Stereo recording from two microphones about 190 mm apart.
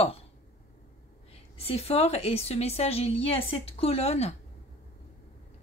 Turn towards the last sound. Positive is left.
turn(degrees=35)  # may be behind; listen again after turning